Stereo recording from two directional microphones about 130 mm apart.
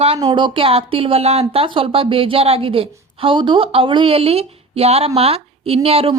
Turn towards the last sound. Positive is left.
turn(degrees=-50)  # may be behind; listen again after turning